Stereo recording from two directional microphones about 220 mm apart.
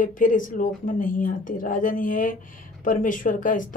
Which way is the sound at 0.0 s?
35° left (ahead or behind).